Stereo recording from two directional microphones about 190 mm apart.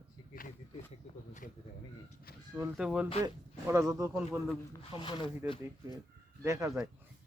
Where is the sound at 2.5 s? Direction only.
5° right (ahead or behind).